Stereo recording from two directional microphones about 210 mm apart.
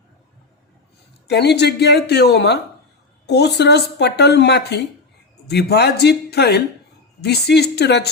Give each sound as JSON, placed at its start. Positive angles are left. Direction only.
{"t": 1.3, "sound": "speech", "side_deg": 50}